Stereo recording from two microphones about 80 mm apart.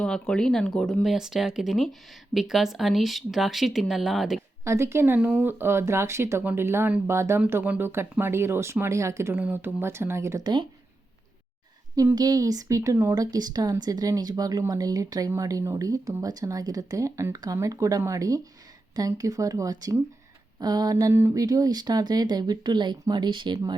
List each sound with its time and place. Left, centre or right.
0.0 s speech: centre
1.0 s speech: centre
4.6 s speech: right
6.4 s speech: right
6.7 s speech: right
7.6 s speech: right
9.4 s speech: right
10.4 s speech: right
12.1 s speech: right
13.1 s speech: right
21.1 s speech: right
21.4 s speech: right